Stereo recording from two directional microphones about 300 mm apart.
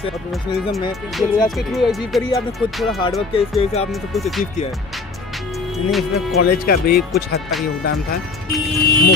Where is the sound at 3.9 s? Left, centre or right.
Centre.